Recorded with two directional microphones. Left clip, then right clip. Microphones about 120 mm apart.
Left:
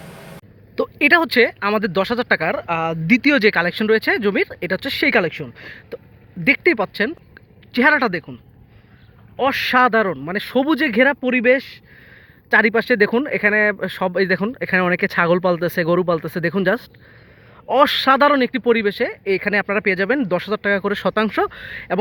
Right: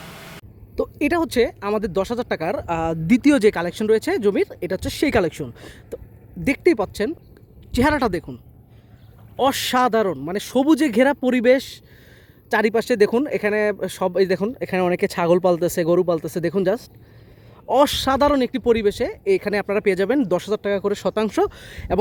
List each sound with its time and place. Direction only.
0.8 s speech: 15° right (ahead or behind)
2.6 s speech: 35° right (ahead or behind)
3.5 s speech: 20° right (ahead or behind)
5.1 s speech: 40° right (ahead or behind)
6.4 s speech: 20° right (ahead or behind)
7.7 s speech: 30° right (ahead or behind)
9.4 s speech: 40° right (ahead or behind)
9.7 s speech: 20° right (ahead or behind)
11.2 s speech: 60° right (ahead or behind)
12.5 s speech: 20° right (ahead or behind)
21.2 s speech: 25° right (ahead or behind)